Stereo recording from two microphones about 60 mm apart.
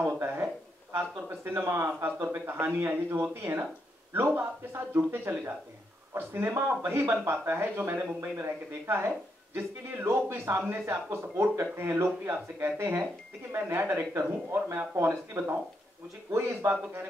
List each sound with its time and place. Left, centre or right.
0.9 s speech: right